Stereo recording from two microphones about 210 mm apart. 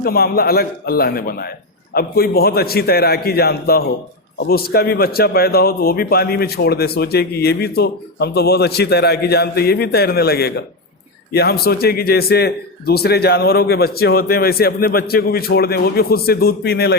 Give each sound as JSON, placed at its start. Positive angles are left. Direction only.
{"t": 0.0, "sound": "a man's voice", "side_deg": 45}